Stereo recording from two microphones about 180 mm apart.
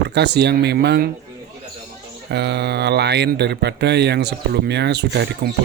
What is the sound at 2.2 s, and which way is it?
Speech, 65° right (ahead or behind).